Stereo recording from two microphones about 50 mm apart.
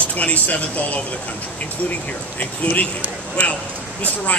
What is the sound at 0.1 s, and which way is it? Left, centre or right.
Speech, left.